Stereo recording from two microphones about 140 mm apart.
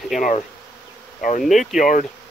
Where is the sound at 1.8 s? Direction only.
65° left (ahead or behind).